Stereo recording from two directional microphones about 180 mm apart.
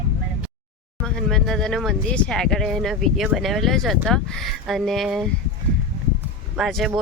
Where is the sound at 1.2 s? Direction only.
Centre (ahead or behind).